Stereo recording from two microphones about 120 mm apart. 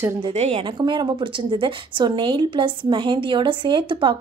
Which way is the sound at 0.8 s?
40° right (ahead or behind).